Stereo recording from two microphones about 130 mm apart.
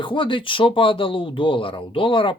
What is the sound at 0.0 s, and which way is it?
Speech, 40° left (ahead or behind).